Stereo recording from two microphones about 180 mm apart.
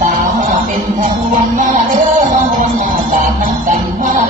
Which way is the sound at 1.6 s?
50° right (ahead or behind).